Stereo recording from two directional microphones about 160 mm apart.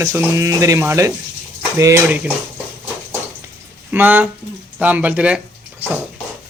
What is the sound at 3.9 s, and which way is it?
Speech, 10° right (ahead or behind).